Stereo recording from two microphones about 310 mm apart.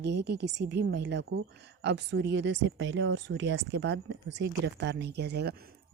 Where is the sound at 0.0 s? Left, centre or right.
Right.